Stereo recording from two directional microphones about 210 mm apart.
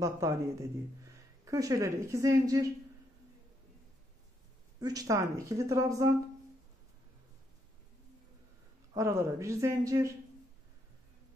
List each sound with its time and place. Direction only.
0.0 s a woman's voice: 15° right (ahead or behind)
4.7 s a woman's voice: 20° right (ahead or behind)
8.9 s a woman's voice: 15° right (ahead or behind)